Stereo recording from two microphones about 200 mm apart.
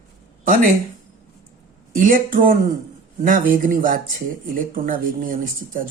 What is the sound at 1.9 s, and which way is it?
Speech, 45° right (ahead or behind).